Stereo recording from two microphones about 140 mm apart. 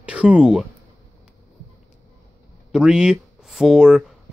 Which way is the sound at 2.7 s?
5° right (ahead or behind).